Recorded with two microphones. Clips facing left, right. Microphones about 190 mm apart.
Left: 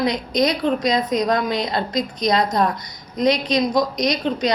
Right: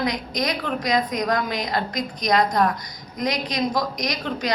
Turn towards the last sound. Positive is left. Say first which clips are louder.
# left 6 dB
turn(degrees=25)  # may be behind; listen again after turning